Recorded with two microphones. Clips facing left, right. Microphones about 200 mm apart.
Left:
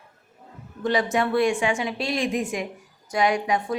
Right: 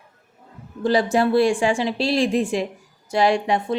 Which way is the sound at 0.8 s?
30° right (ahead or behind).